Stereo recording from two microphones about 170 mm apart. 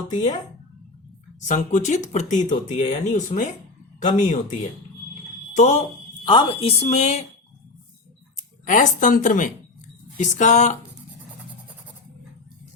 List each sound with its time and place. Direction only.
0.1 s speech: 45° left (ahead or behind)
1.5 s speech: 45° left (ahead or behind)
6.2 s a woman's voice: 30° left (ahead or behind)
8.4 s speech: 50° left (ahead or behind)